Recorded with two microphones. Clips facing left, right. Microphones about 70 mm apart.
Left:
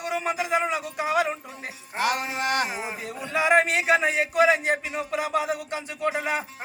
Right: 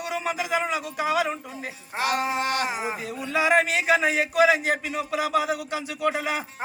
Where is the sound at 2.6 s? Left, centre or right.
Centre.